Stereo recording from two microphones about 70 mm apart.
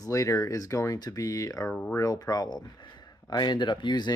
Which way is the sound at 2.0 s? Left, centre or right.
Left.